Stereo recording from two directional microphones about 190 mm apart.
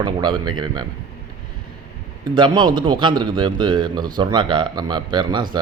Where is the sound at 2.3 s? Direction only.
25° right (ahead or behind).